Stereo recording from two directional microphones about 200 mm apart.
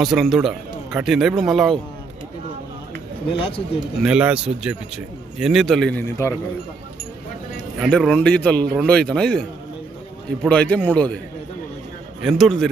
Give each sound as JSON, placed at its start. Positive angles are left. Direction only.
{"t": 0.0, "sound": "a man's voice", "side_deg": 0}
{"t": 3.3, "sound": "a man's voice", "side_deg": 30}
{"t": 4.0, "sound": "a man's voice", "side_deg": -5}
{"t": 7.8, "sound": "a man's voice", "side_deg": 0}
{"t": 10.4, "sound": "a man's voice", "side_deg": 5}
{"t": 12.2, "sound": "a man's voice", "side_deg": 0}